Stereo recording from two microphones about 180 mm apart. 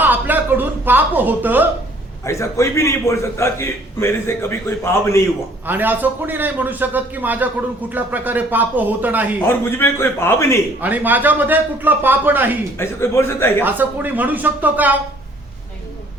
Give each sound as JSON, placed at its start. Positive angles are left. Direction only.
{"t": 0.0, "sound": "a sound", "side_deg": -10}
{"t": 2.2, "sound": "a man's voice", "side_deg": 15}
{"t": 5.6, "sound": "a man's voice", "side_deg": -10}
{"t": 9.5, "sound": "a man's voice", "side_deg": 10}
{"t": 10.8, "sound": "a man's voice", "side_deg": -10}
{"t": 12.7, "sound": "a man's voice", "side_deg": 15}
{"t": 13.7, "sound": "a man's voice", "side_deg": -10}